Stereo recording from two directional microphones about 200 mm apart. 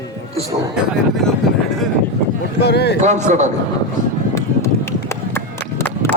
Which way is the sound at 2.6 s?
55° left (ahead or behind).